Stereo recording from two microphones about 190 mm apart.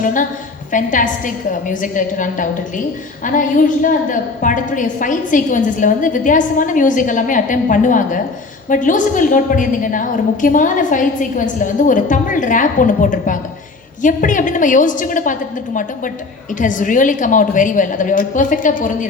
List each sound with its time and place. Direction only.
0.0 s a woman's voice: 45° left (ahead or behind)